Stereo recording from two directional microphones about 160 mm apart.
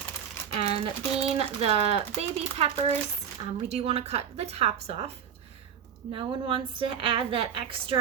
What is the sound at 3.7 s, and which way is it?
A woman's voice, 40° right (ahead or behind).